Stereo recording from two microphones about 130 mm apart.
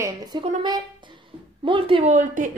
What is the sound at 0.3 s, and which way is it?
Speech, 35° right (ahead or behind).